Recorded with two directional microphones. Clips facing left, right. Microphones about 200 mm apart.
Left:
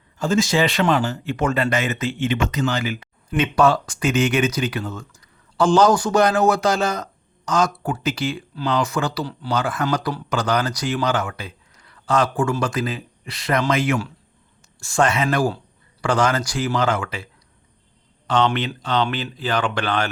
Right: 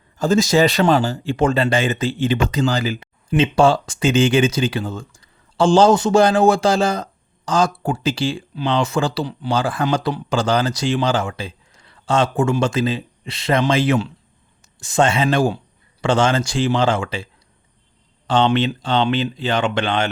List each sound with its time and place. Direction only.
0.2 s speech: 40° right (ahead or behind); by 9.6 s 20° right (ahead or behind)
9.6 s speech: 30° right (ahead or behind)
18.3 s speech: 30° right (ahead or behind)